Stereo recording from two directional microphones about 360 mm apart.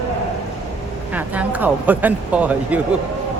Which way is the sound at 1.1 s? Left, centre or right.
Centre.